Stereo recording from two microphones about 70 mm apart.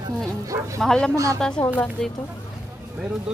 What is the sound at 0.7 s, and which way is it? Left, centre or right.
Speech, centre.